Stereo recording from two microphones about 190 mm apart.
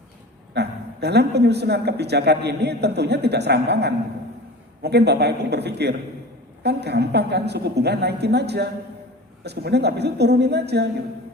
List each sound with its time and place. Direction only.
0.5 s a woman's voice: 60° right (ahead or behind)